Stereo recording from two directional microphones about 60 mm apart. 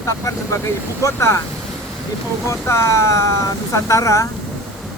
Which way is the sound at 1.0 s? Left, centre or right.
Left.